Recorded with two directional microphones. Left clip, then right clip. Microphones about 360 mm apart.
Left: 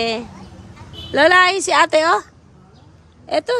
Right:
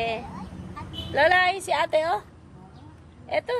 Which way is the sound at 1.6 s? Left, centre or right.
Left.